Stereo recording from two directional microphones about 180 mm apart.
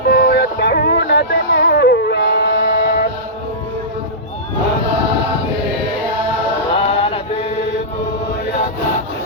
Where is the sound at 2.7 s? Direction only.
55° left (ahead or behind).